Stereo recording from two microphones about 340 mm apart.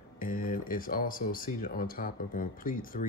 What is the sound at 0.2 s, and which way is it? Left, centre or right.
Speech, left.